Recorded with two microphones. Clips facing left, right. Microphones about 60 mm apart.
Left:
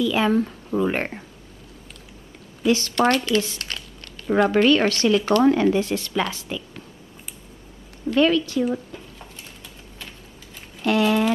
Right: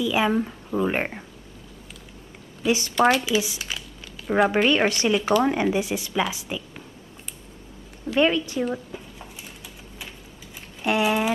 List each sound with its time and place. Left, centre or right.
0.0 s a woman's voice: centre
2.6 s speech: centre
3.0 s a woman's voice: centre
8.2 s a woman's voice: right
8.9 s a sound: centre
10.8 s speech: centre